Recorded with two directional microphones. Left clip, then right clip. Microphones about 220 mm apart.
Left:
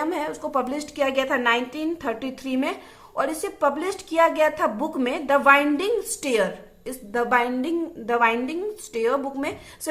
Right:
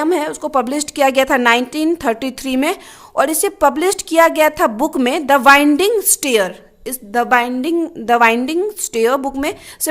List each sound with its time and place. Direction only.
0.0 s a woman's voice: 45° right (ahead or behind)